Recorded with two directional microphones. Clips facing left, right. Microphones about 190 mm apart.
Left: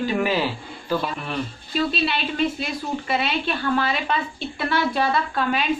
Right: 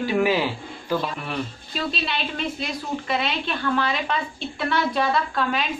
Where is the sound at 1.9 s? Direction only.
5° left (ahead or behind).